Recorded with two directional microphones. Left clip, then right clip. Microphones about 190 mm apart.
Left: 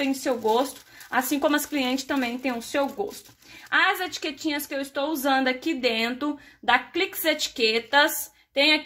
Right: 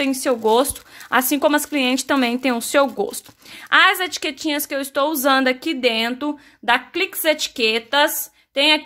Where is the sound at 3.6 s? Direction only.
35° right (ahead or behind).